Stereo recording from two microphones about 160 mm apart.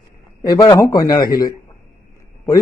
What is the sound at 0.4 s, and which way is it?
A man's voice, 25° left (ahead or behind).